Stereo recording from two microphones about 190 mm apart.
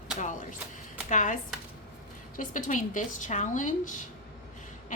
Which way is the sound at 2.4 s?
45° left (ahead or behind).